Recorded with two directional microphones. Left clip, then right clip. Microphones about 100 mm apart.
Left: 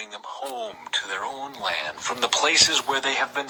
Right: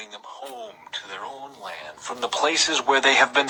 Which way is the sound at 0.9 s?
70° left (ahead or behind).